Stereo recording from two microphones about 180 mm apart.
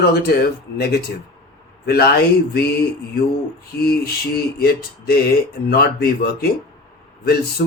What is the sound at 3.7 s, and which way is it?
Speech, 60° left (ahead or behind).